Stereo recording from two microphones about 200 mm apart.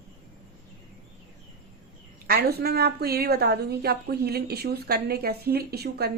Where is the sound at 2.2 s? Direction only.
50° right (ahead or behind).